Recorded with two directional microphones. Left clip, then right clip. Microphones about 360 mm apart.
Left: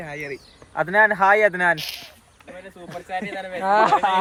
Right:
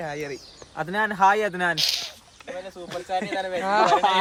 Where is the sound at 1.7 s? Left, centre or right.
Right.